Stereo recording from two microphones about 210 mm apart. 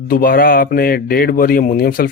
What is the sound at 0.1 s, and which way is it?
A man's voice, 45° left (ahead or behind).